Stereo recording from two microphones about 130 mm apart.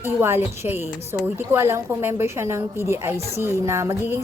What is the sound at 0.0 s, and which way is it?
A woman's voice, 20° right (ahead or behind).